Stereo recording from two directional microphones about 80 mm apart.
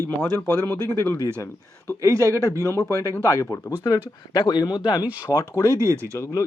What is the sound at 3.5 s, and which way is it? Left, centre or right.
Speech, left.